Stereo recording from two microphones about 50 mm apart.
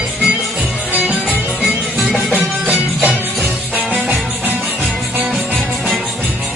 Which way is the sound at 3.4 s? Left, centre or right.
Right.